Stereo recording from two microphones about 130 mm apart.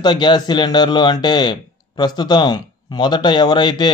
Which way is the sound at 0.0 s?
35° left (ahead or behind).